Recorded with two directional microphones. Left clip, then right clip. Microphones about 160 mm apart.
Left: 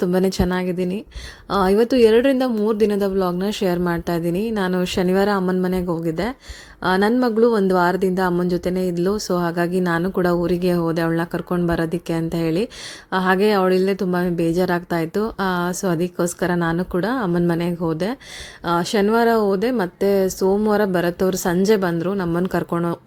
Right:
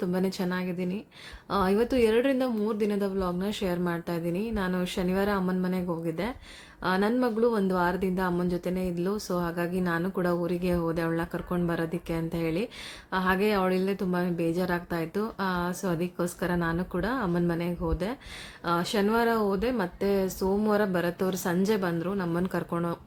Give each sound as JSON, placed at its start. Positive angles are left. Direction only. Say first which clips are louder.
{"t": 0.0, "sound": "a woman's voice", "louder": "left 10 dB", "side_deg": 50}